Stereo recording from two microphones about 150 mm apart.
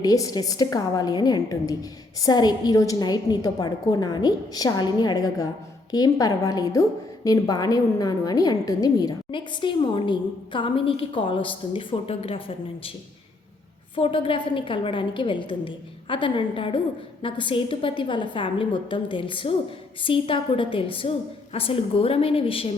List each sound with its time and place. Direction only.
0.0 s a woman's voice: 25° left (ahead or behind)
13.9 s a woman's voice: 35° left (ahead or behind)